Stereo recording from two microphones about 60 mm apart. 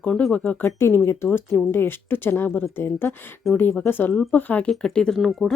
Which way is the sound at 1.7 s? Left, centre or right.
Left.